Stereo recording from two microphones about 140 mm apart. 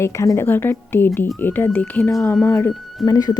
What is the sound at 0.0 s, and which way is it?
A woman's voice, 20° left (ahead or behind).